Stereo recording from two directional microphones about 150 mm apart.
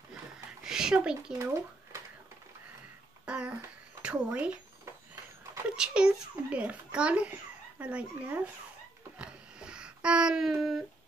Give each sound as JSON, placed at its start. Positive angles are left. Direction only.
{"t": 0.7, "sound": "a child's voice", "side_deg": -5}
{"t": 1.4, "sound": "speech", "side_deg": -20}
{"t": 3.3, "sound": "babbling", "side_deg": -5}
{"t": 4.0, "sound": "speech", "side_deg": -5}
{"t": 5.8, "sound": "a child's voice", "side_deg": -5}
{"t": 9.2, "sound": "a sound", "side_deg": -5}